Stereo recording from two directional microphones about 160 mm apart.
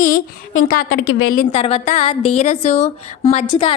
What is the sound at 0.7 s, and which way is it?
Speech, 70° left (ahead or behind).